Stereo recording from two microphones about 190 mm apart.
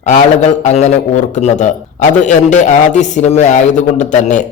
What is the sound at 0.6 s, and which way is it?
Speech, 35° left (ahead or behind).